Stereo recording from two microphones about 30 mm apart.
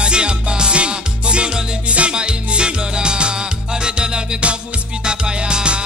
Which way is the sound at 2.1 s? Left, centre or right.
Right.